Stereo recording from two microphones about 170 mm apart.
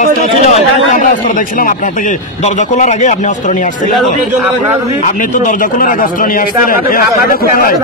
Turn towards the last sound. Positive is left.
turn(degrees=60)  # may be behind; listen again after turning